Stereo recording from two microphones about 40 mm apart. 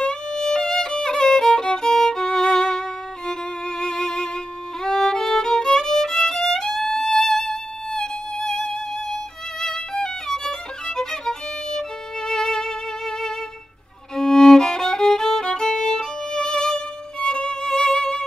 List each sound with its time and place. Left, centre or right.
0.0 s violin: centre